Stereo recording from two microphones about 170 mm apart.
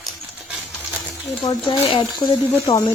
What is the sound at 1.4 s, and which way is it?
Speech, 30° left (ahead or behind).